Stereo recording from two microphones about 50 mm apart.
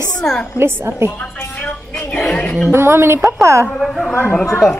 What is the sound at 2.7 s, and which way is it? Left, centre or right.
Speech, right.